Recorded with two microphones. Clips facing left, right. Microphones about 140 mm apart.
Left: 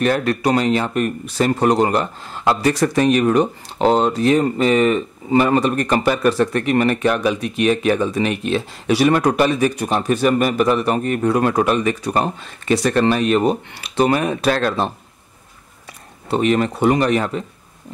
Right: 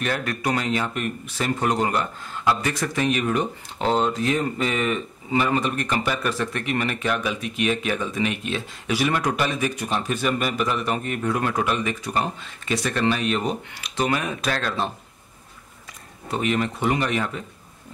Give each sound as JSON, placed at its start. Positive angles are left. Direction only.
{"t": 0.0, "sound": "speech", "side_deg": 35}
{"t": 14.0, "sound": "speech", "side_deg": 35}
{"t": 16.3, "sound": "speech", "side_deg": 40}